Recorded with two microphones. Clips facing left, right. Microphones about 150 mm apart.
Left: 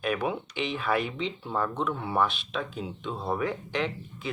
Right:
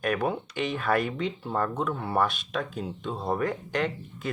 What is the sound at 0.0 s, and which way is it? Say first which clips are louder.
Speech: right 2 dB; 45° right (ahead or behind).